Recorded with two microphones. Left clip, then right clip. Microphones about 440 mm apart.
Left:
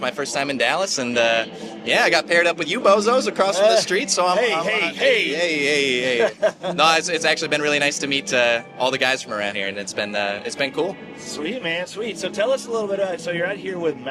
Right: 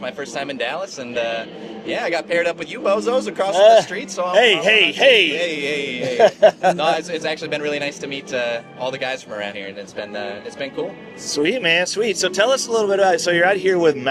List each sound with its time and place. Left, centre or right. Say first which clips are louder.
0.0 s a man's voice: left 3 dB; left
4.6 s speech: right 6 dB; right
5.3 s a man's voice: left 2 dB; centre
6.1 s speech: right 7 dB; right
6.7 s a man's voice: left 2 dB; left
11.3 s speech: right 8 dB; right